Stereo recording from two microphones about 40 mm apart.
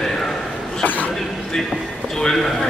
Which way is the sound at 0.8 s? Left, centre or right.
Left.